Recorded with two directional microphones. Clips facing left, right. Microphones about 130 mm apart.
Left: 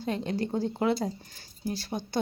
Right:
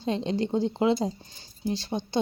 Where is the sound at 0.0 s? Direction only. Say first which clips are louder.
Right 3 dB; 25° right (ahead or behind).